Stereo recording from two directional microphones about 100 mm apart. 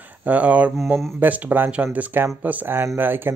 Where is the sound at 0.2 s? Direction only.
15° right (ahead or behind).